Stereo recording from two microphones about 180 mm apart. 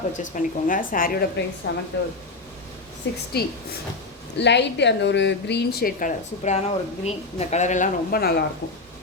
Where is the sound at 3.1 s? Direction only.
75° left (ahead or behind).